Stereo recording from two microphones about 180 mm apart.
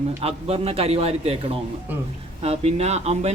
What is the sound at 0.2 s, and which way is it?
A man's voice, 35° right (ahead or behind).